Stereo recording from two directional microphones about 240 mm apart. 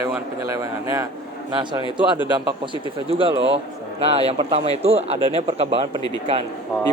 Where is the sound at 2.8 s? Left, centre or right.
Right.